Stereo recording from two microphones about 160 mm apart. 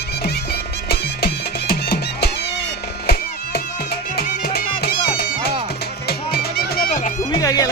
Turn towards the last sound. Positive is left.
turn(degrees=25)  # may be behind; listen again after turning